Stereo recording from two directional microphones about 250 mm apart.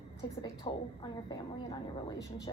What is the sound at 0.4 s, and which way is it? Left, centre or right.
Speech, centre.